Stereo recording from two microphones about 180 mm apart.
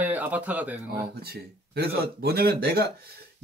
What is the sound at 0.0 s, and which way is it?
Speech, 10° right (ahead or behind).